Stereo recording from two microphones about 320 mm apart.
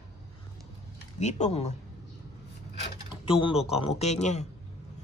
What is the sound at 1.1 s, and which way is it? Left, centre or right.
Speech, left.